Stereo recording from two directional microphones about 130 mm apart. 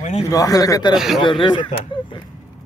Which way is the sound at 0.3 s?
25° left (ahead or behind).